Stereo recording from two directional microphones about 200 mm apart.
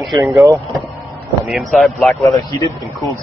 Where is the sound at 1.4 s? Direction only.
Centre (ahead or behind).